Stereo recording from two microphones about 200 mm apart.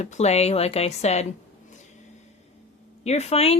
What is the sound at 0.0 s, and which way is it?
Speech, 35° left (ahead or behind).